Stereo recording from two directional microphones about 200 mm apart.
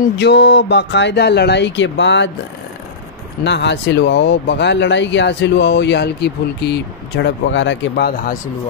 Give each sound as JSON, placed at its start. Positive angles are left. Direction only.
{"t": 0.2, "sound": "speech", "side_deg": 55}
{"t": 3.4, "sound": "speech", "side_deg": 60}